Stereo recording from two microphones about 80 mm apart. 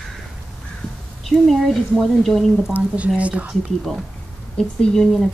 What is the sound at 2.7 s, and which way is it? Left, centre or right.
Speech, centre.